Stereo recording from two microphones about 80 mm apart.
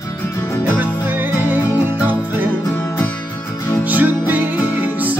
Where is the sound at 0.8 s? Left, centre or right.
Right.